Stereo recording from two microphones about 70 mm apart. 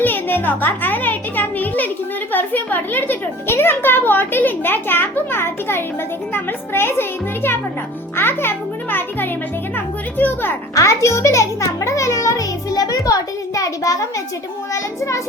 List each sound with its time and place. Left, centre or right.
0.0 s a child's voice: left
8.1 s music: left
10.8 s music: left
14.7 s a child's voice: left